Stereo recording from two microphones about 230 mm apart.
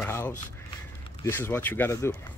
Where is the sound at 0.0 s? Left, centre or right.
Centre.